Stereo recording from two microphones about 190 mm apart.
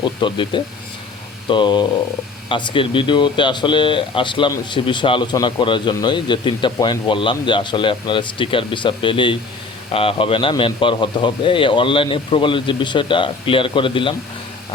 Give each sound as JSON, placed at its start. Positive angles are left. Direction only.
{"t": 0.0, "sound": "speech", "side_deg": 25}